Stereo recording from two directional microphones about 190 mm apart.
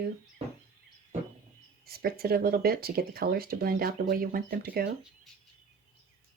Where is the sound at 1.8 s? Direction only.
55° right (ahead or behind).